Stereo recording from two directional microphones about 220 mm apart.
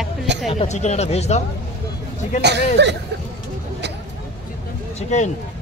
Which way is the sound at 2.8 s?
50° right (ahead or behind).